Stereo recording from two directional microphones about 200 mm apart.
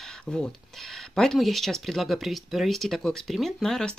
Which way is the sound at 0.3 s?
Centre (ahead or behind).